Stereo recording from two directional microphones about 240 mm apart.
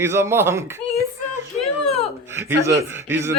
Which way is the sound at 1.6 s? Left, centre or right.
Left.